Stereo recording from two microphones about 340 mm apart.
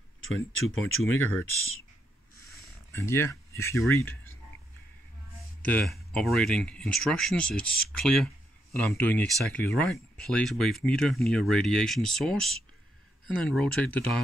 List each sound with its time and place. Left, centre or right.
0.6 s speech: left
1.0 s speech: centre
2.5 s speech: centre
5.6 s speech: centre